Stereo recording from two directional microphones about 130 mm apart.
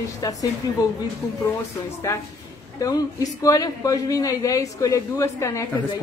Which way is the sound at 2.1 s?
20° left (ahead or behind).